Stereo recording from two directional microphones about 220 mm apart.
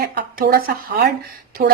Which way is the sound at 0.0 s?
40° right (ahead or behind).